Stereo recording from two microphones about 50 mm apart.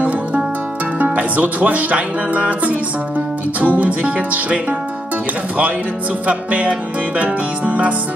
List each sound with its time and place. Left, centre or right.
0.9 s music: right
6.2 s music: right